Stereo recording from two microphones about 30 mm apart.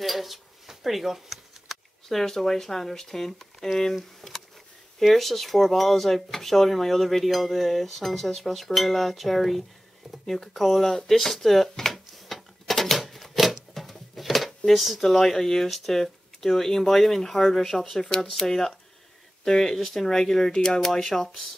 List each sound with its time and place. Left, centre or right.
0.0 s dishes: centre
0.7 s a sound: centre
2.0 s speech: centre
4.2 s a sound: centre
4.9 s speech: centre
11.9 s a sound: centre
14.7 s speech: centre
15.0 s speech: centre
20.8 s speech: centre